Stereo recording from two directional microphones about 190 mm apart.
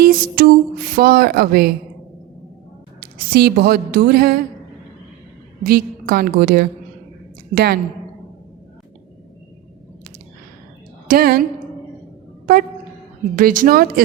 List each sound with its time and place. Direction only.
0.0 s speech: 50° right (ahead or behind)
3.3 s speech: 55° right (ahead or behind)
5.6 s a woman's voice: 55° right (ahead or behind)
11.1 s speech: 50° right (ahead or behind)
13.3 s speech: 45° right (ahead or behind)